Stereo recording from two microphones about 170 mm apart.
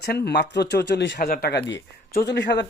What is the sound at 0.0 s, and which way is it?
Speech, 70° left (ahead or behind).